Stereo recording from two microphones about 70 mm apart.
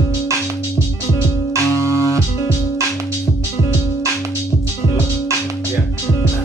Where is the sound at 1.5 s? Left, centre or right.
Right.